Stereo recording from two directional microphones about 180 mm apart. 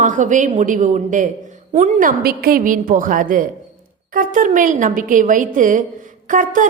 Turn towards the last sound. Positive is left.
turn(degrees=-45)  # may be behind; listen again after turning